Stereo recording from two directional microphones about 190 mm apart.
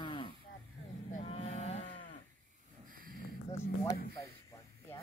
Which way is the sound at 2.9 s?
50° right (ahead or behind).